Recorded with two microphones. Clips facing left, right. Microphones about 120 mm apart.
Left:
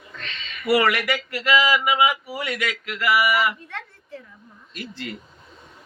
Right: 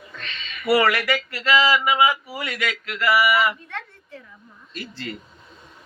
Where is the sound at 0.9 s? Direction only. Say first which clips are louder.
Right 1 dB; 20° left (ahead or behind).